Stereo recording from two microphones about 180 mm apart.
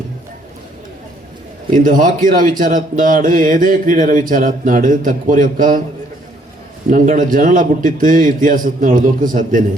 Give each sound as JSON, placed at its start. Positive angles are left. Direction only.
{"t": 1.7, "sound": "speech", "side_deg": -45}
{"t": 6.8, "sound": "speech", "side_deg": -45}